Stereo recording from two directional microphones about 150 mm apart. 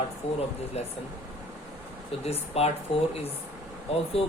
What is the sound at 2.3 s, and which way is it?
Speech, 45° left (ahead or behind).